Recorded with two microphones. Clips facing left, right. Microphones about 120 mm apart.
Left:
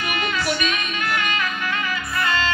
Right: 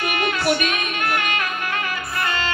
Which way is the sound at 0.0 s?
55° right (ahead or behind).